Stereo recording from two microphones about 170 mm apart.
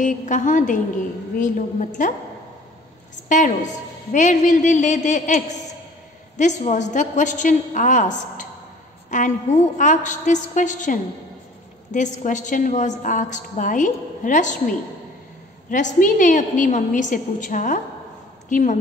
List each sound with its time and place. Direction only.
0.0 s a woman's voice: 50° left (ahead or behind)
3.3 s a woman's voice: 45° left (ahead or behind)